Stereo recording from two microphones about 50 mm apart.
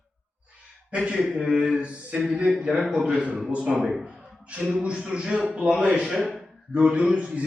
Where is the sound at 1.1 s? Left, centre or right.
Centre.